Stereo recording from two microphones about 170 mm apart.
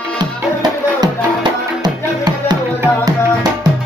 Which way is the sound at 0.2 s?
25° right (ahead or behind).